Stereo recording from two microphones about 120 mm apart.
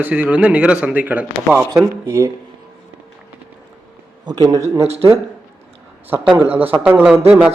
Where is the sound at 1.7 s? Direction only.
25° right (ahead or behind).